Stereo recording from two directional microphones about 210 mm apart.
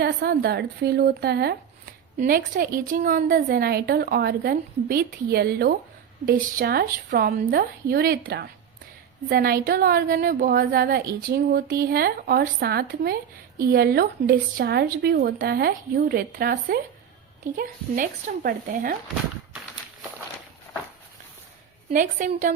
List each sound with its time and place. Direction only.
0.0 s a woman's voice: 45° right (ahead or behind)
21.9 s speech: 40° right (ahead or behind)